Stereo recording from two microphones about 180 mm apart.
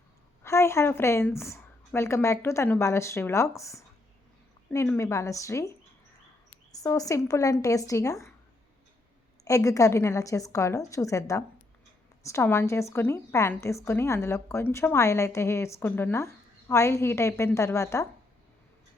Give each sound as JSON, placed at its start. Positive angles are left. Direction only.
{"t": 0.4, "sound": "a woman's voice", "side_deg": 15}
{"t": 9.4, "sound": "a woman's voice", "side_deg": 20}